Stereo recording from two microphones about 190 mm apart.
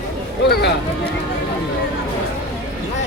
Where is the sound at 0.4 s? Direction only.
55° left (ahead or behind).